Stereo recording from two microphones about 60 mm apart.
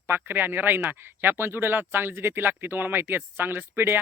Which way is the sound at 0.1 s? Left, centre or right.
Right.